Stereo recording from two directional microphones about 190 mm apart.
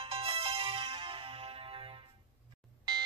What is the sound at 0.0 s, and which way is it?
Music, 30° right (ahead or behind).